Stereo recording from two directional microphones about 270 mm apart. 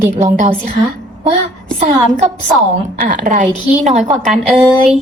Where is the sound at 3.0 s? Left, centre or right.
Right.